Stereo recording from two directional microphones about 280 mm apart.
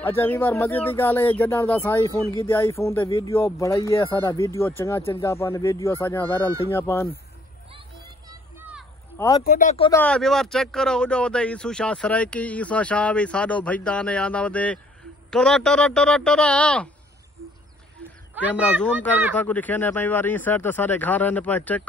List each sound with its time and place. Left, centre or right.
0.0 s speech: centre
8.3 s a sound: centre
9.4 s speech: left
9.8 s speech: centre
18.6 s speech: centre
19.3 s speech: centre